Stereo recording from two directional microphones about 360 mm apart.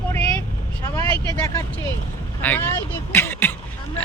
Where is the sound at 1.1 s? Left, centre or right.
Centre.